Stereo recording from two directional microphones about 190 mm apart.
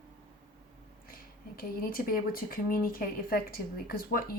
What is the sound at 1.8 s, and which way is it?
A woman's voice, 50° left (ahead or behind).